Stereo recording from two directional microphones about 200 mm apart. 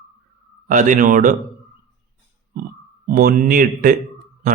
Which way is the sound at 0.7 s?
40° right (ahead or behind).